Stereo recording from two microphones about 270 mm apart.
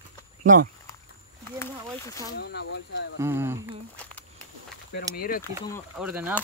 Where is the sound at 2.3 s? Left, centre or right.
Left.